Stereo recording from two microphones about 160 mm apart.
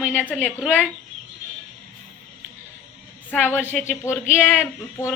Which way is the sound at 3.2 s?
10° left (ahead or behind).